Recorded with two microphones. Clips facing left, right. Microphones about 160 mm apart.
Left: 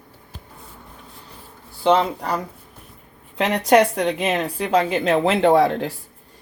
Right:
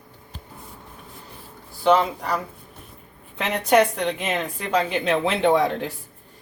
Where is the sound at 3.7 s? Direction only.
35° left (ahead or behind).